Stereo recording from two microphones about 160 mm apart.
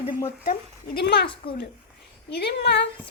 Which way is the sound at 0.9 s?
85° left.